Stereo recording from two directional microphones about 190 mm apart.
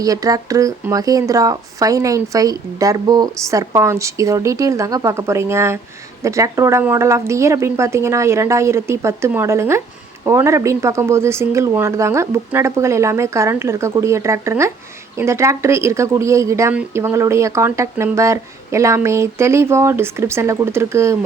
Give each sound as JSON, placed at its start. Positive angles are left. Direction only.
{"t": 0.0, "sound": "speech", "side_deg": -20}